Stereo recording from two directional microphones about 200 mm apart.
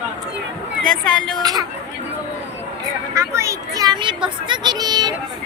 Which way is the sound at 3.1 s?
15° right (ahead or behind).